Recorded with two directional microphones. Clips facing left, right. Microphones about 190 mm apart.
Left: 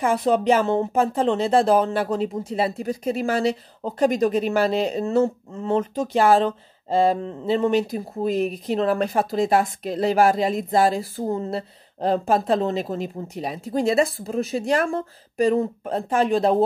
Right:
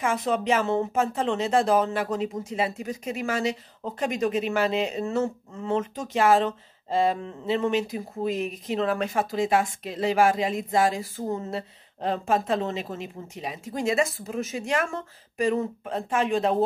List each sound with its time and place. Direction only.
0.0 s speech: 35° left (ahead or behind)